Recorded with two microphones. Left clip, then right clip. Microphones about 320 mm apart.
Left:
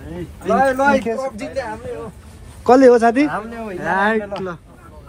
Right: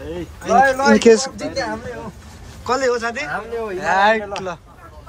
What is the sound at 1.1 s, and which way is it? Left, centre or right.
Speech, right.